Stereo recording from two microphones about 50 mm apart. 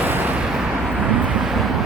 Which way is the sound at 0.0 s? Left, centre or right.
Right.